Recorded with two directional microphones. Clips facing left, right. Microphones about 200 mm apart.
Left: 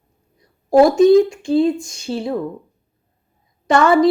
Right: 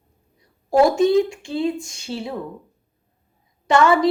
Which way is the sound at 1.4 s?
40° left (ahead or behind).